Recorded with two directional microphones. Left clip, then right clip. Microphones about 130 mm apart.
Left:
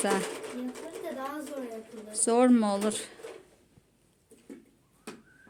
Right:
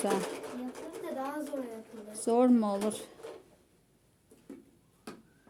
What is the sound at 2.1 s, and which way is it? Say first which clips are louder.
Speech: left 3 dB; 10° right (ahead or behind).